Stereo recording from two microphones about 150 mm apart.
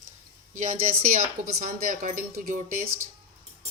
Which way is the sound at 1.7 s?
65° right (ahead or behind).